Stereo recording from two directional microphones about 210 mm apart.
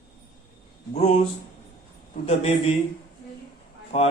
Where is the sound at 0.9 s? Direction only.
30° left (ahead or behind).